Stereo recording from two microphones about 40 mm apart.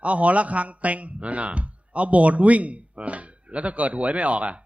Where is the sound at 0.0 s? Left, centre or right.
Right.